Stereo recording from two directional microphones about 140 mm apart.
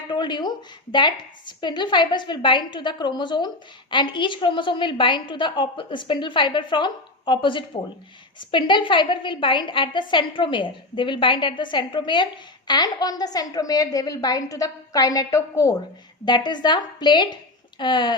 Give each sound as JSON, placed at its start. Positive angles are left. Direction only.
{"t": 0.1, "sound": "a woman's voice", "side_deg": 35}